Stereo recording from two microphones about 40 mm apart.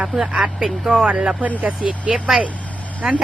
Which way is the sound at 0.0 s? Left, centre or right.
Centre.